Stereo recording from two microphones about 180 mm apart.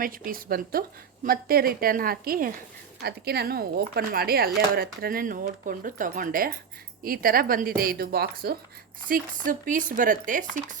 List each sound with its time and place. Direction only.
0.0 s a woman's voice: 50° right (ahead or behind)